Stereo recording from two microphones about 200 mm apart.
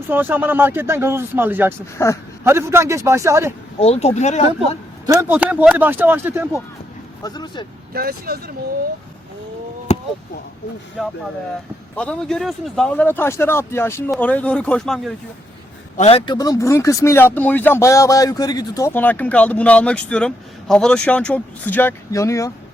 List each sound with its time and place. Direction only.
0.1 s speech: 10° right (ahead or behind)
2.0 s speech: 10° left (ahead or behind)
2.4 s speech: 10° right (ahead or behind)
3.8 s speech: 30° left (ahead or behind)
5.0 s speech: 10° right (ahead or behind)
7.2 s speech: 20° left (ahead or behind)
7.9 s speech: 50° right (ahead or behind)
11.9 s speech: 5° left (ahead or behind)
16.0 s speech: 30° left (ahead or behind)